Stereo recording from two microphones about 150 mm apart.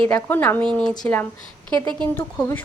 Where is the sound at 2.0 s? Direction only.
10° left (ahead or behind).